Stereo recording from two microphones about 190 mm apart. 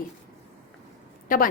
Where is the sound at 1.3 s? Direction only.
45° left (ahead or behind).